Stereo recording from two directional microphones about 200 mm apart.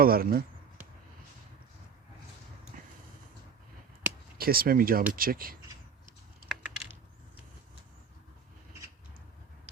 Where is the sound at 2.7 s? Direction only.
40° right (ahead or behind).